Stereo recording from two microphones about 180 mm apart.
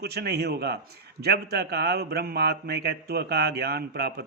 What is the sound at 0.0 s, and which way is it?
Speech, 65° right (ahead or behind).